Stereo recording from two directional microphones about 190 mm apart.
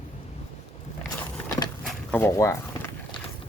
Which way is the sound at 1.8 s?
10° left (ahead or behind).